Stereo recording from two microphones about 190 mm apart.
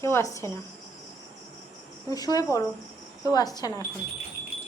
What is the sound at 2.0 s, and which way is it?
Speech, 20° left (ahead or behind).